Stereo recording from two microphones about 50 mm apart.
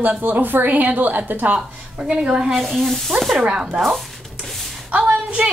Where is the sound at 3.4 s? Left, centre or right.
Centre.